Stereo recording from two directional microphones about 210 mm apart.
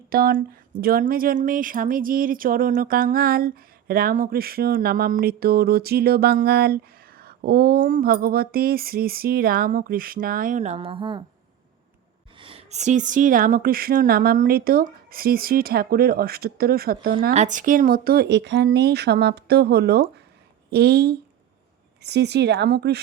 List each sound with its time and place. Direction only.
0.1 s speech: 45° right (ahead or behind); by 11.2 s 25° right (ahead or behind)
12.4 s speech: 25° right (ahead or behind); by 17.1 s 45° right (ahead or behind)
17.3 s speech: 35° right (ahead or behind); by 23.0 s 50° right (ahead or behind)